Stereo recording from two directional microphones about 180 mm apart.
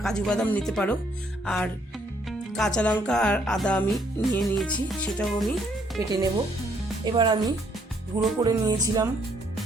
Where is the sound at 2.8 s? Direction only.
5° left (ahead or behind).